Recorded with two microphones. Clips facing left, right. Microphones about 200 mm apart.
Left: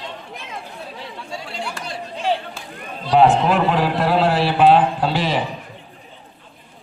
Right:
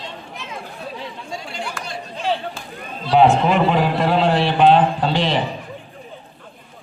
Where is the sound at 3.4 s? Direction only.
Centre (ahead or behind).